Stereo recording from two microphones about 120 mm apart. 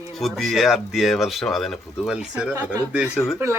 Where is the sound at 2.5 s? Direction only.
25° right (ahead or behind).